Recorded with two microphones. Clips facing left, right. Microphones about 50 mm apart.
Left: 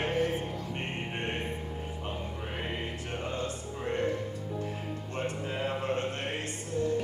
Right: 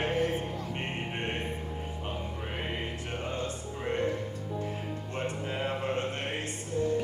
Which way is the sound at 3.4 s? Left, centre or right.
Right.